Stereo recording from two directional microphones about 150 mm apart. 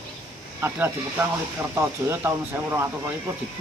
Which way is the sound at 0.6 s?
15° right (ahead or behind).